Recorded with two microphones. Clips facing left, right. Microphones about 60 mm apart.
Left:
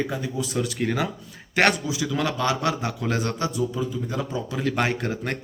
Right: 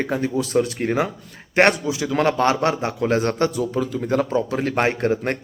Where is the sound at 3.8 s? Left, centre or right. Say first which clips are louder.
Right 7 dB; right.